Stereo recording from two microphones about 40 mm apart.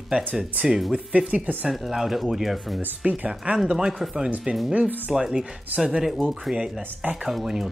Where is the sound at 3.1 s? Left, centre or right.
Right.